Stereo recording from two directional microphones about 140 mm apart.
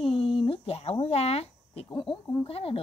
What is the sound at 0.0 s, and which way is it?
A woman's voice, 40° left (ahead or behind).